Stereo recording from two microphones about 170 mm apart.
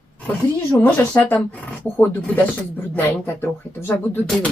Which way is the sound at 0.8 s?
10° left (ahead or behind).